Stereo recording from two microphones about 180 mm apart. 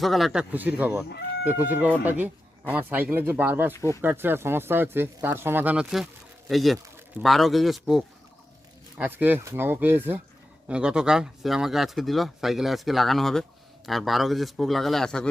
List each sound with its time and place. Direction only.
0.0 s speech: centre (ahead or behind)
3.8 s speech: 15° left (ahead or behind)
4.0 s speech: 10° right (ahead or behind)